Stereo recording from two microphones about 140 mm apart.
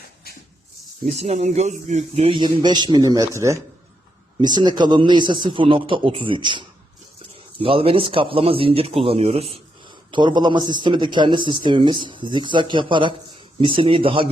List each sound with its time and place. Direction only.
1.2 s a man's voice: 50° right (ahead or behind); by 3.6 s 20° right (ahead or behind)
4.4 s a man's voice: 30° right (ahead or behind)
9.9 s a man's voice: 30° right (ahead or behind)